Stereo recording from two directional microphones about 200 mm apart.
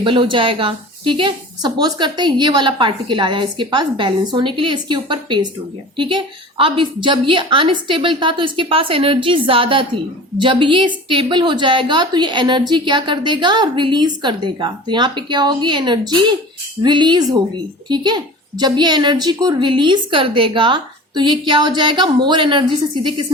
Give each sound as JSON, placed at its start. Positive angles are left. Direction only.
{"t": 0.0, "sound": "a woman's voice", "side_deg": -25}